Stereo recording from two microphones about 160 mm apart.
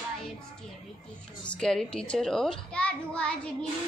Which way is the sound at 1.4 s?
5° left (ahead or behind).